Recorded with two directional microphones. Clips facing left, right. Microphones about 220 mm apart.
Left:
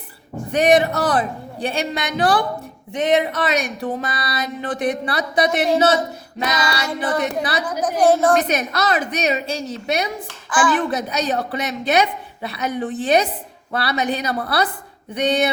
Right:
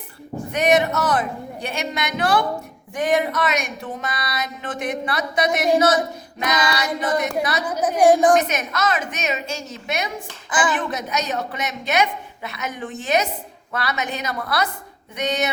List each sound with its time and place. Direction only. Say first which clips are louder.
0.5 s speech: left 3 dB; 35° left (ahead or behind)
2.9 s speech: left 2 dB; 20° left (ahead or behind)
6.4 s child singing: even; 30° left (ahead or behind)
7.7 s a woman's voice: right 1 dB; 10° right (ahead or behind)
8.4 s speech: left 2 dB; 35° left (ahead or behind)